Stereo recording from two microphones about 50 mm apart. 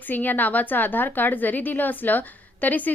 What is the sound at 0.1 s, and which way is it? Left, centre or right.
A woman's voice, left.